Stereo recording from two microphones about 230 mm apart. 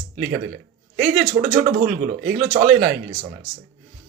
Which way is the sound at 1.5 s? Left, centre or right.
Right.